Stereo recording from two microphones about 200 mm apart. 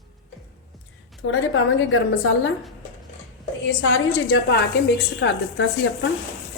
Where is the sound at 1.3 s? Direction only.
70° left (ahead or behind).